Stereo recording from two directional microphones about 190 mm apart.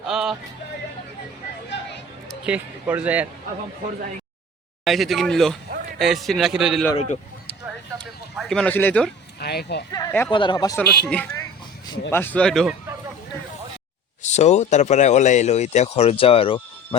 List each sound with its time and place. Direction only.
0.1 s music: 5° right (ahead or behind)
2.5 s speech: 10° right (ahead or behind)
4.9 s a man's voice: centre (ahead or behind)
6.9 s speech: 35° left (ahead or behind)
8.4 s a man's voice: 5° left (ahead or behind)
9.4 s speech: 55° left (ahead or behind)
10.1 s speech: 10° left (ahead or behind)
10.3 s speech: 25° left (ahead or behind)
10.8 s speech: 10° left (ahead or behind)
14.2 s speech: 35° left (ahead or behind)